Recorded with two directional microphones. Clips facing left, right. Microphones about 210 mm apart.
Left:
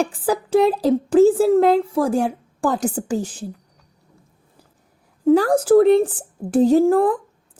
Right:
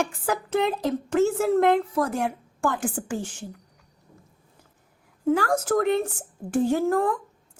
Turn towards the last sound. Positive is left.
turn(degrees=35)  # may be behind; listen again after turning